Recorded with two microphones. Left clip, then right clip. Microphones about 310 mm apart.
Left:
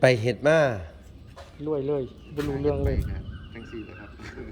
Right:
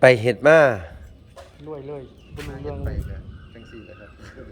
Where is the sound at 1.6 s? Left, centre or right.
Left.